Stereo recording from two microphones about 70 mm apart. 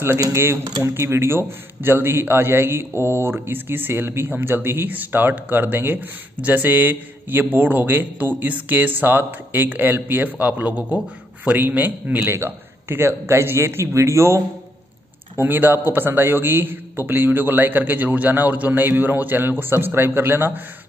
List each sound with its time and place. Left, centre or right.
0.2 s a man's voice: right
15.3 s speech: right